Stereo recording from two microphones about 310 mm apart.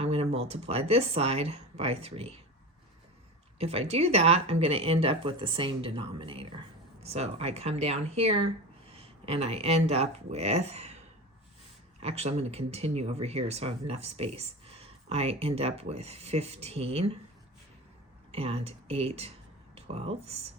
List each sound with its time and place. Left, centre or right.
0.0 s speech: centre
3.6 s speech: centre
18.3 s speech: centre